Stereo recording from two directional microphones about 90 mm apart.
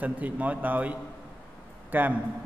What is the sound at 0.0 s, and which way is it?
A man's voice, 20° right (ahead or behind).